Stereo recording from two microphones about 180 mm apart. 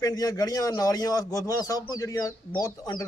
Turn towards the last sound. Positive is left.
turn(degrees=20)  # may be behind; listen again after turning